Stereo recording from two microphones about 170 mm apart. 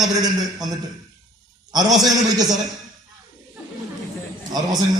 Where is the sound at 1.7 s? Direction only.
20° right (ahead or behind).